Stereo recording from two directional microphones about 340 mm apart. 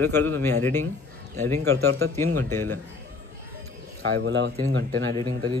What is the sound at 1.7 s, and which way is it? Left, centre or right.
Speech, right.